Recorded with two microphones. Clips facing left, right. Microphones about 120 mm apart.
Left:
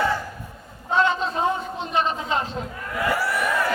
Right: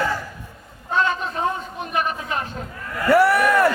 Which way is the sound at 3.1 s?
65° right (ahead or behind).